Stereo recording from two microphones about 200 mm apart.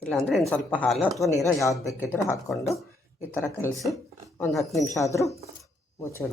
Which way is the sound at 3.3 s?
10° left (ahead or behind).